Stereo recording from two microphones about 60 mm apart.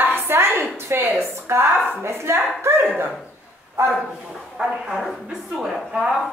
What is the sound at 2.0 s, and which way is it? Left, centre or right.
Speech, right.